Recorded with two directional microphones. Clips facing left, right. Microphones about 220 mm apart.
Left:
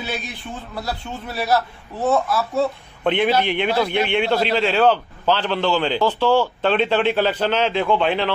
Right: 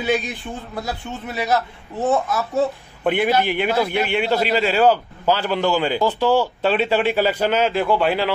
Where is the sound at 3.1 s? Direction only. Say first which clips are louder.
Even; 5° right (ahead or behind).